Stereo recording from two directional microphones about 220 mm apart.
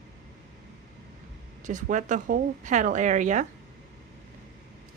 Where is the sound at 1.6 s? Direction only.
35° right (ahead or behind).